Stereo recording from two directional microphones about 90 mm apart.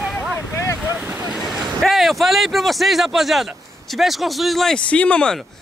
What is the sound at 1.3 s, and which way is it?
Speech, centre (ahead or behind).